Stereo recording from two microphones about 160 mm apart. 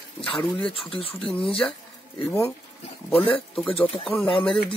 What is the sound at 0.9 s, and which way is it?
Speech, 35° left (ahead or behind).